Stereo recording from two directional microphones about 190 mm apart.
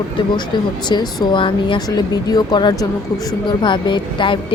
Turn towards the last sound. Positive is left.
turn(degrees=25)  # may be behind; listen again after turning